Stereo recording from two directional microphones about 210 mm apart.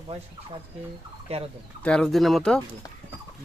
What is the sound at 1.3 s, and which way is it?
Fowl, 30° right (ahead or behind).